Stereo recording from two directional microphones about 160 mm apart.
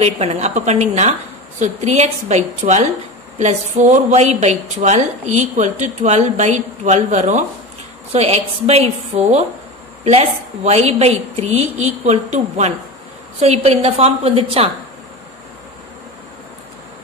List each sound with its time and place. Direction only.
0.0 s a woman's voice: 40° right (ahead or behind)